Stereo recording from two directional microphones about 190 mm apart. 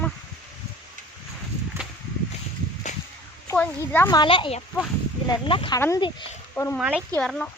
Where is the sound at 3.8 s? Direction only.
15° left (ahead or behind).